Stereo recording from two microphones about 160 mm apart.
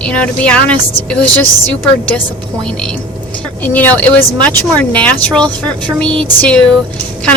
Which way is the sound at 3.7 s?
10° left (ahead or behind).